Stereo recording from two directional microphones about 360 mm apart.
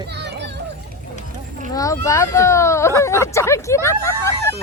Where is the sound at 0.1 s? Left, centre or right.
Right.